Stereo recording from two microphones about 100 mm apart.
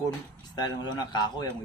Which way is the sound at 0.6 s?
45° left (ahead or behind).